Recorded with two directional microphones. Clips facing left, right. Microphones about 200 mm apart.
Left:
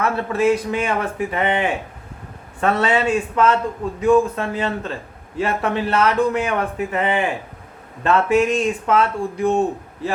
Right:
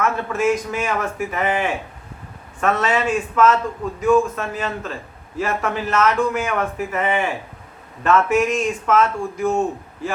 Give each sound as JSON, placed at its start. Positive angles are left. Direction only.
{"t": 0.0, "sound": "a man's voice", "side_deg": 35}